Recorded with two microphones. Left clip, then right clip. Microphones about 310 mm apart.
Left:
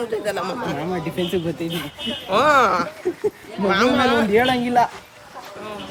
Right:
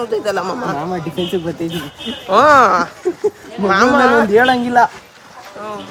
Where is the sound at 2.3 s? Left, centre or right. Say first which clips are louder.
Right 7 dB; centre.